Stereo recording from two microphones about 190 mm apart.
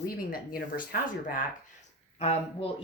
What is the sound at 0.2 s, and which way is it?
Speech, 50° left (ahead or behind).